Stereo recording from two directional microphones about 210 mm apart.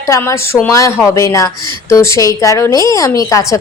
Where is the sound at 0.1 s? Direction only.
15° left (ahead or behind).